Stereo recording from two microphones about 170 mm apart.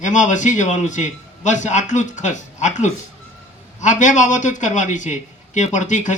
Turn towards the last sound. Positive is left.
turn(degrees=45)  # may be behind; listen again after turning